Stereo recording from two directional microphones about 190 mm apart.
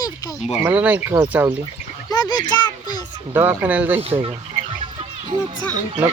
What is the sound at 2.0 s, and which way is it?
Speech, 20° left (ahead or behind).